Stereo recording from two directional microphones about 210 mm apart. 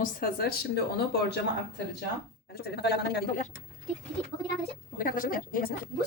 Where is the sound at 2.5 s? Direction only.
50° left (ahead or behind).